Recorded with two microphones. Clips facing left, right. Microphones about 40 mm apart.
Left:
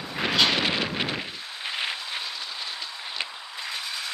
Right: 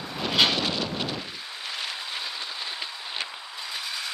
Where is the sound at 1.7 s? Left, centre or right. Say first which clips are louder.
Left 4 dB; left.